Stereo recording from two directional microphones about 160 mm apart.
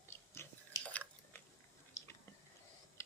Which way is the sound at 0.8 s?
10° left (ahead or behind).